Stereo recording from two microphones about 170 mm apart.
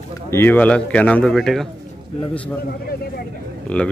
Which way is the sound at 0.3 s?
10° left (ahead or behind).